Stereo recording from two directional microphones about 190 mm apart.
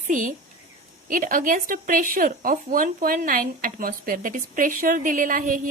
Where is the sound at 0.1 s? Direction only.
45° right (ahead or behind).